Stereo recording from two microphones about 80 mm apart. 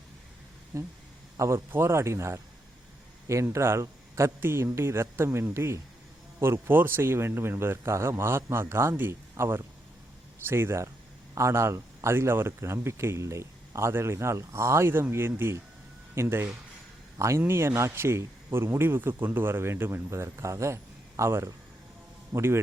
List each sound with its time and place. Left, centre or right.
0.7 s a man's voice: right